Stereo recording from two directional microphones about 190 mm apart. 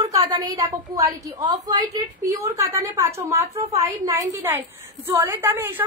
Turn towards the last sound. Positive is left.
turn(degrees=-10)  # may be behind; listen again after turning